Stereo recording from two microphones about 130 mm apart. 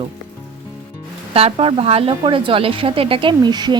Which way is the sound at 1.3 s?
50° right (ahead or behind).